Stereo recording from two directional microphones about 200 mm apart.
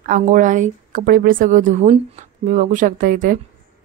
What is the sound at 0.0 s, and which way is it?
A woman's voice, 40° right (ahead or behind).